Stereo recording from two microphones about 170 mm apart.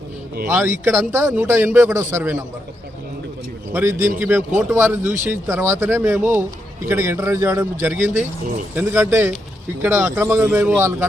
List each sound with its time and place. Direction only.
0.4 s a man's voice: 10° right (ahead or behind)
3.7 s a man's voice: 15° right (ahead or behind)